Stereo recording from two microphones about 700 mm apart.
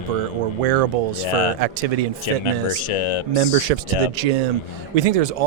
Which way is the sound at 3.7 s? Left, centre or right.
Right.